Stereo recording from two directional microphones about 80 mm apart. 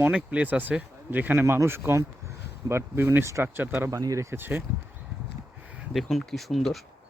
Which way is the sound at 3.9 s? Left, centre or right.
Right.